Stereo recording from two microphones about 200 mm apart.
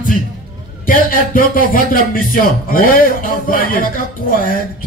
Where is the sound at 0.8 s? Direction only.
45° left (ahead or behind).